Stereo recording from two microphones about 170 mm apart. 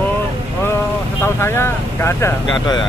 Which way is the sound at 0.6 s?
15° left (ahead or behind).